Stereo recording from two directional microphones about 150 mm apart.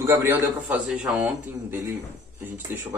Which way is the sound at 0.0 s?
15° right (ahead or behind).